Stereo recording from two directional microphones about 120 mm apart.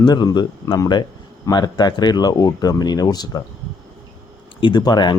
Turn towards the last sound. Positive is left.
turn(degrees=35)  # may be behind; listen again after turning